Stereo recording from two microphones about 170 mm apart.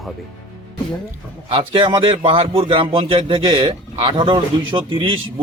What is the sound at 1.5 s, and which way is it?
Speech, 30° right (ahead or behind).